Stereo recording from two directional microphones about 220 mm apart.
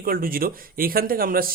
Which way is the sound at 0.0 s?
40° right (ahead or behind).